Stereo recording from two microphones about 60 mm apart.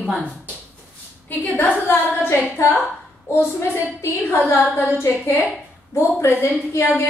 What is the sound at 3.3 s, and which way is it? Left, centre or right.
A woman's voice, left.